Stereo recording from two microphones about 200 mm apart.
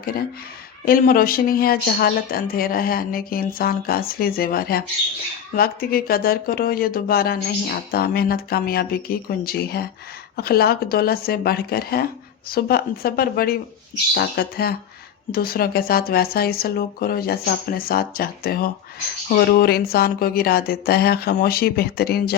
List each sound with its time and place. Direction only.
0.0 s speech: 50° left (ahead or behind)